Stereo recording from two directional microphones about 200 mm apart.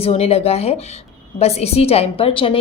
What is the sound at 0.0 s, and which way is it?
A woman's voice, 30° left (ahead or behind).